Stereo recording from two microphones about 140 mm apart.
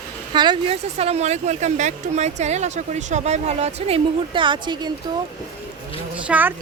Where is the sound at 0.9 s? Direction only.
50° right (ahead or behind); by 4.9 s 35° right (ahead or behind).